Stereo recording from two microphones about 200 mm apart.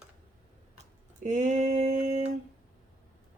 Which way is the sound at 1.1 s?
40° right (ahead or behind).